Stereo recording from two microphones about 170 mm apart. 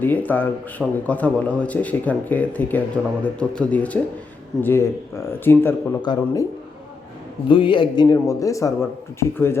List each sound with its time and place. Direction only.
0.0 s a man's voice: 10° left (ahead or behind)
6.0 s a man's voice: 25° left (ahead or behind)
7.4 s a man's voice: 30° left (ahead or behind)